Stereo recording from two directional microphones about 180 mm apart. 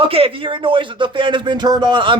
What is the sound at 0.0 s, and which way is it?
Speech, 30° right (ahead or behind).